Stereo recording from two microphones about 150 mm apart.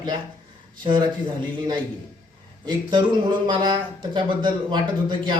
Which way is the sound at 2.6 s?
30° right (ahead or behind).